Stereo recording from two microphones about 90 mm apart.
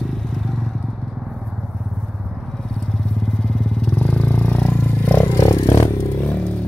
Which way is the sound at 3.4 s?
5° left (ahead or behind).